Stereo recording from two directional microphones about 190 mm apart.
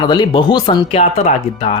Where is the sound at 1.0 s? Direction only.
35° left (ahead or behind).